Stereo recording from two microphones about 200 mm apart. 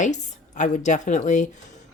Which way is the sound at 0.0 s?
40° left (ahead or behind).